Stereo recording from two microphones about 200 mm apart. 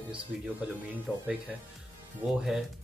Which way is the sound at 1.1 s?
5° right (ahead or behind).